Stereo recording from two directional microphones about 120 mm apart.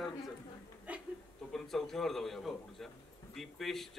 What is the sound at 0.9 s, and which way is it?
Speech, 10° right (ahead or behind).